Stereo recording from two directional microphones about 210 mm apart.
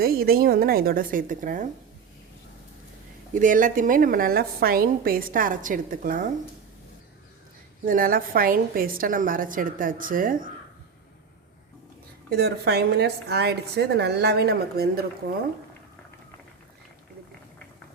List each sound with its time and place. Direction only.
0.0 s a woman's voice: 45° right (ahead or behind)
3.3 s a woman's voice: 40° right (ahead or behind)
7.9 s a woman's voice: 40° right (ahead or behind)
12.3 s a woman's voice: 50° right (ahead or behind)